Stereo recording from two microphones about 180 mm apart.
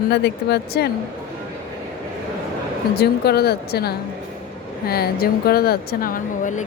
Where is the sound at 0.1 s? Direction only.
65° left (ahead or behind).